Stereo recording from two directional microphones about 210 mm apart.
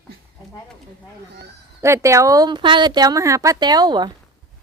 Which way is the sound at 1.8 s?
15° right (ahead or behind).